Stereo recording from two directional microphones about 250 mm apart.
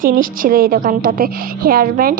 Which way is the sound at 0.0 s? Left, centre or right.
Right.